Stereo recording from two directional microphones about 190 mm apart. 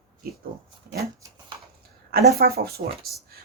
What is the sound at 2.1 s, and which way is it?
Speech, 55° right (ahead or behind).